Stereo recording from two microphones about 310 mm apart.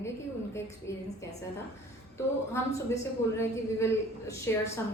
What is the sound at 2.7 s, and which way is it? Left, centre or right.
A woman's voice, centre.